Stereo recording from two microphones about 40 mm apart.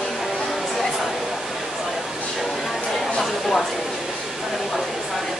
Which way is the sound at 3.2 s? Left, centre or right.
Centre.